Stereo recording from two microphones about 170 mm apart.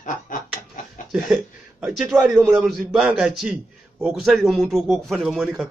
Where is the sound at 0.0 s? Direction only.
50° left (ahead or behind).